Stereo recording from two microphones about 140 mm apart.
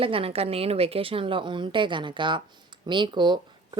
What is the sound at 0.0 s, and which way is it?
Speech, 40° right (ahead or behind).